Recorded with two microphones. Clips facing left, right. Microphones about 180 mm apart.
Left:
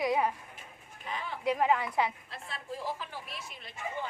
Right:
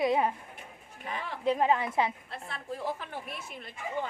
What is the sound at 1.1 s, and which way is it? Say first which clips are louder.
Speech: right 1 dB; 70° right (ahead or behind).